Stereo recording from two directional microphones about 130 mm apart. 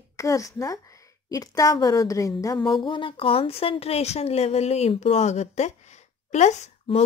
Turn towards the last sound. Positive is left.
turn(degrees=60)  # may be behind; listen again after turning